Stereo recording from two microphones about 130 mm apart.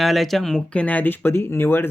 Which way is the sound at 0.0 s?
Centre (ahead or behind).